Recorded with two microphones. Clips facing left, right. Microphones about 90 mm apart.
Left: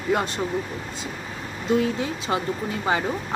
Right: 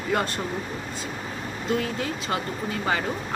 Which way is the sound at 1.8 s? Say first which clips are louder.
Left 4 dB; 20° left (ahead or behind).